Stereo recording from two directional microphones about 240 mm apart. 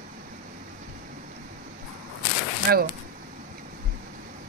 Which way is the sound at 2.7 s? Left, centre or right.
Right.